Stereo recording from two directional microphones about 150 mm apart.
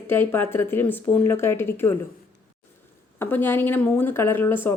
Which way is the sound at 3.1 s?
15° left (ahead or behind).